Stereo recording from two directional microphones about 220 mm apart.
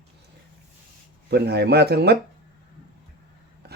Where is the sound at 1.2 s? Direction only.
45° right (ahead or behind).